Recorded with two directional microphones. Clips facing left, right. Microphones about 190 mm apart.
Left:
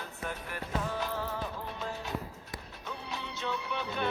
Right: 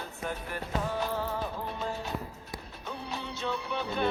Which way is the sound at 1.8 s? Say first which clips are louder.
Right 1 dB; 30° right (ahead or behind).